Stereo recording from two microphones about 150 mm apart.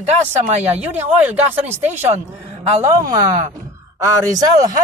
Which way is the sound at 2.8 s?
25° right (ahead or behind).